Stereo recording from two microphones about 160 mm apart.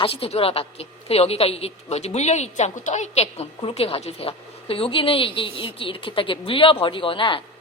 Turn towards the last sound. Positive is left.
turn(degrees=35)  # may be behind; listen again after turning